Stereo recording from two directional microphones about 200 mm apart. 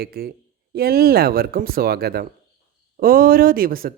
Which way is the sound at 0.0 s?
50° right (ahead or behind).